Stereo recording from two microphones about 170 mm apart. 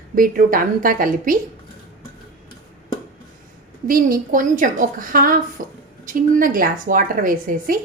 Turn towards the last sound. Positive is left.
turn(degrees=-55)  # may be behind; listen again after turning